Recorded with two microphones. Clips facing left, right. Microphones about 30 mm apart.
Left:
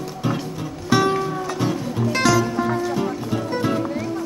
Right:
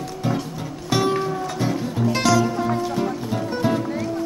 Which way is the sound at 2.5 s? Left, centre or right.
Centre.